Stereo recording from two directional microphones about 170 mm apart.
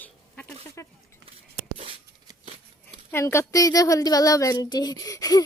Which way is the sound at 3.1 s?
15° left (ahead or behind).